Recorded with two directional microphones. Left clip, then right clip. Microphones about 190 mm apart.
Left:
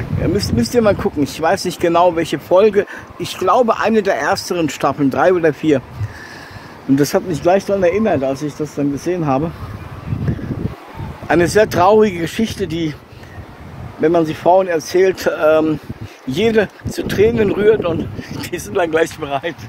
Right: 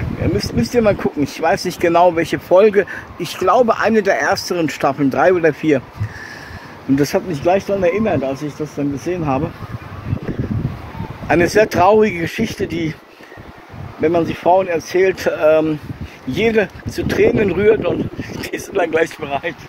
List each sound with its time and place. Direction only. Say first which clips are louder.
0.4 s speech: left 1 dB; 15° left (ahead or behind)
7.0 s speech: left 1 dB; 20° left (ahead or behind)
11.2 s speech: even; 15° left (ahead or behind)
14.0 s speech: left 2 dB; 30° left (ahead or behind)